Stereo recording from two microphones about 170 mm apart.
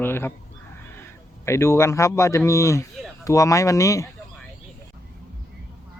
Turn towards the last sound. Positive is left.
turn(degrees=20)  # may be behind; listen again after turning